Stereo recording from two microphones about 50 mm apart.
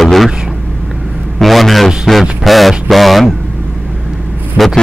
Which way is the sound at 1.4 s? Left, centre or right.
Centre.